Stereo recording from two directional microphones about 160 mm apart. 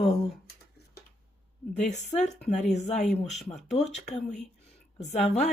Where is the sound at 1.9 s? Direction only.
45° left (ahead or behind).